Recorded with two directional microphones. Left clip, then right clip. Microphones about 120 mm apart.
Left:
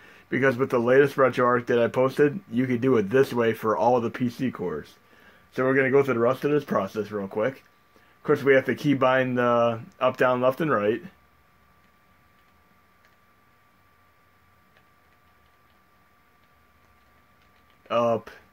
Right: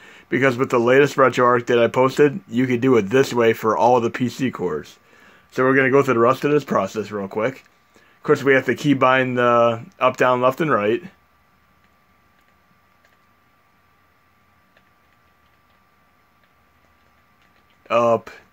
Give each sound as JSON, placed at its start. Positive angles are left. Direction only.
{"t": 0.0, "sound": "speech", "side_deg": -50}
{"t": 5.6, "sound": "speech", "side_deg": -85}
{"t": 17.8, "sound": "speech", "side_deg": -55}